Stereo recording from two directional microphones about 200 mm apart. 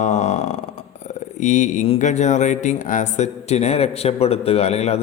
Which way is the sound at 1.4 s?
40° left (ahead or behind).